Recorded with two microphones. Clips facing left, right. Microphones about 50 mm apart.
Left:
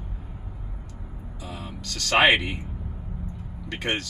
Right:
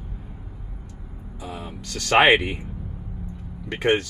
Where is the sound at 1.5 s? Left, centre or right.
Right.